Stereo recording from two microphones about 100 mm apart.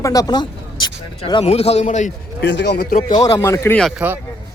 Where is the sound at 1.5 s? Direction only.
90° left.